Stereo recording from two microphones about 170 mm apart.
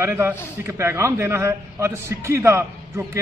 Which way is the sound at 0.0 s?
15° right (ahead or behind).